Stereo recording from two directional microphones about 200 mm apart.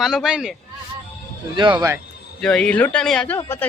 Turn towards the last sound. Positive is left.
turn(degrees=10)  # may be behind; listen again after turning